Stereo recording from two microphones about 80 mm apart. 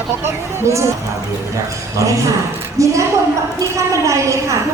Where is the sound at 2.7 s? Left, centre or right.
Right.